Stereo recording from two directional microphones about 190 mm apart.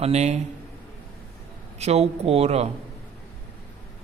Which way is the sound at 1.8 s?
35° right (ahead or behind).